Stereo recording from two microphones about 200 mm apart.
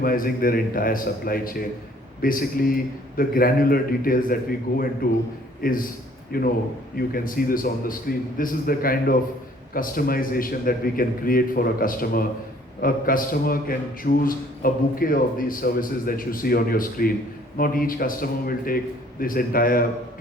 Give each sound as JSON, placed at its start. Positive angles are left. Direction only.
{"t": 0.0, "sound": "a man's voice", "side_deg": 45}